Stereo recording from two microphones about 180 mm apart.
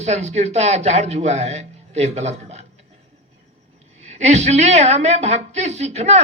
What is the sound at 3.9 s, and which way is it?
Speech, 40° right (ahead or behind).